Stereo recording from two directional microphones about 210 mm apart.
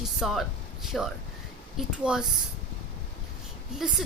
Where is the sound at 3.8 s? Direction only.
Centre (ahead or behind).